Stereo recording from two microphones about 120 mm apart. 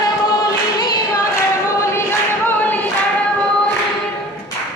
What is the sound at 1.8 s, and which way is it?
Choir, 25° left (ahead or behind).